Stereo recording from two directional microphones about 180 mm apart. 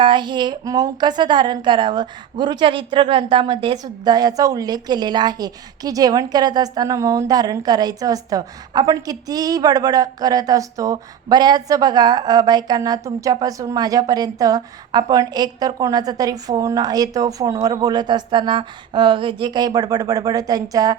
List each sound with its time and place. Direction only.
0.0 s a woman's voice: 25° right (ahead or behind)